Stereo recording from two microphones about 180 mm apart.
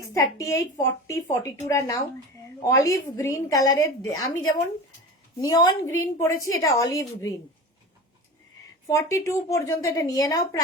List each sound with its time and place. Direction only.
0.0 s a woman's voice: 20° left (ahead or behind)
8.9 s a woman's voice: 15° left (ahead or behind)